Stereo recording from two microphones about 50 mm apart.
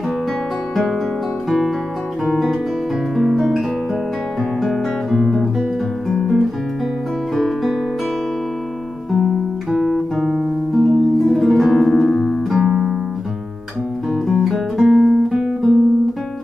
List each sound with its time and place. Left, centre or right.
3.2 s guitar: centre
9.1 s music: centre
12.5 s music: centre
14.1 s music: centre
15.0 s guitar: centre